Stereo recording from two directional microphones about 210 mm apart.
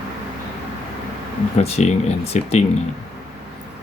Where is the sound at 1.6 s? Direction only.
30° left (ahead or behind).